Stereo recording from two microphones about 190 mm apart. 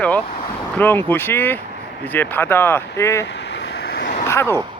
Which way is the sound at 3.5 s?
65° left (ahead or behind).